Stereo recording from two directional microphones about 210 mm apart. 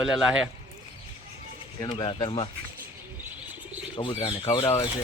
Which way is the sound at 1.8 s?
20° left (ahead or behind).